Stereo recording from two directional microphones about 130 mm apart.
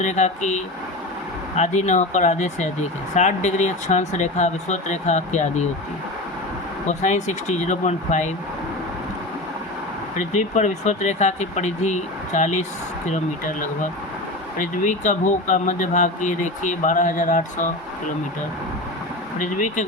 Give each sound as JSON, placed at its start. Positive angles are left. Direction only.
{"t": 0.0, "sound": "speech", "side_deg": 65}
{"t": 6.8, "sound": "speech", "side_deg": 65}
{"t": 10.2, "sound": "speech", "side_deg": 65}
{"t": 19.4, "sound": "speech", "side_deg": 75}